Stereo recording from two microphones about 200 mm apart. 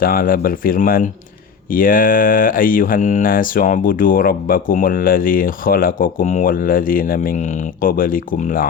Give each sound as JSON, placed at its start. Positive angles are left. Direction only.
{"t": 0.0, "sound": "speech", "side_deg": 45}